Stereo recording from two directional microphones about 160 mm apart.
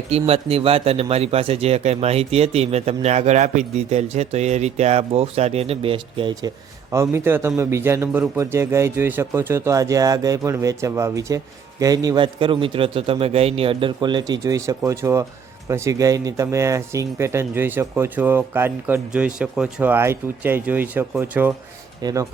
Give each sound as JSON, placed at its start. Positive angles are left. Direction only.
{"t": 0.1, "sound": "speech", "side_deg": -40}
{"t": 6.9, "sound": "speech", "side_deg": -15}